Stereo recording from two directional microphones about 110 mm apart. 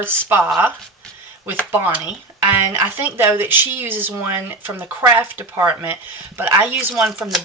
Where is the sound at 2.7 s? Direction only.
15° right (ahead or behind).